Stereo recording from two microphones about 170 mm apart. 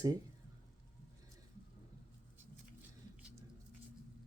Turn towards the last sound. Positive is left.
turn(degrees=-10)  # may be behind; listen again after turning